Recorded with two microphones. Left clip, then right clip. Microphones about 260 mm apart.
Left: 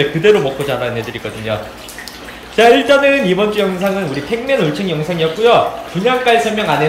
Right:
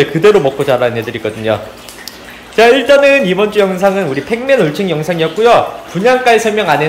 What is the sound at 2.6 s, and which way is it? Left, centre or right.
Speech, centre.